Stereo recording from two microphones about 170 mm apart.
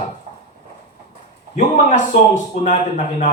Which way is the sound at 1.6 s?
45° left (ahead or behind).